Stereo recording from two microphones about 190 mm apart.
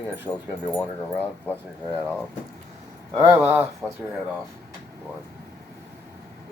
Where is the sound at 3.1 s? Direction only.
25° right (ahead or behind).